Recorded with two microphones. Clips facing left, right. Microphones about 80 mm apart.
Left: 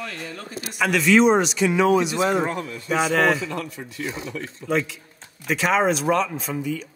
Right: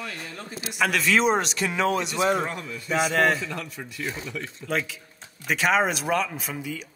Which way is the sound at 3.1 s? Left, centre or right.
Centre.